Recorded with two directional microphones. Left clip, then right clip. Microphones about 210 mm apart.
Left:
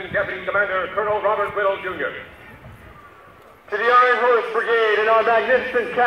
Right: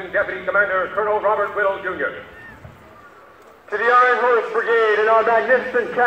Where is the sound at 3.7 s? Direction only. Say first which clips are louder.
Right 1 dB; 60° left (ahead or behind).